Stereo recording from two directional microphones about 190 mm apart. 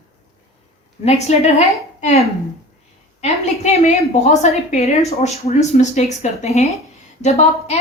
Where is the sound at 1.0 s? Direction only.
35° left (ahead or behind).